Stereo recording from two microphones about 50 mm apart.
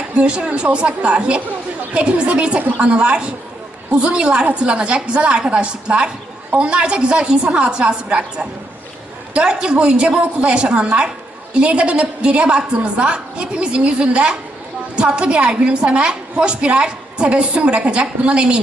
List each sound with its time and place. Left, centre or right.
0.2 s a woman's voice: right